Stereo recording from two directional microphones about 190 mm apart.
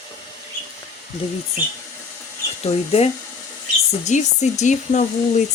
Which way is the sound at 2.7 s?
35° left (ahead or behind).